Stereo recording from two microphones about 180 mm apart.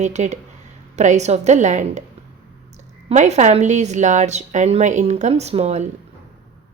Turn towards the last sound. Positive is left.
turn(degrees=-35)  # may be behind; listen again after turning